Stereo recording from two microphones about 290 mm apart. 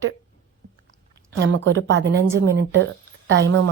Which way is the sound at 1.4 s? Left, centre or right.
Right.